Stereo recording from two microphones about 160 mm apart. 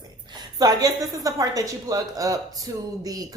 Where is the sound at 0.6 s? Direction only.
25° right (ahead or behind).